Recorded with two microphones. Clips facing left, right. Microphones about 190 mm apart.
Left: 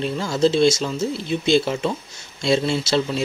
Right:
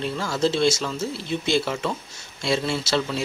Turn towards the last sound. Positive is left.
turn(degrees=20)  # may be behind; listen again after turning